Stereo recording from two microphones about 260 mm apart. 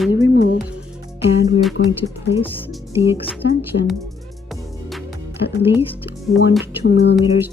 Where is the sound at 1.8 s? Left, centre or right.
Left.